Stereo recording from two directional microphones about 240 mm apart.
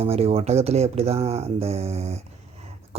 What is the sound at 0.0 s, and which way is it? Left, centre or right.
Speech, right.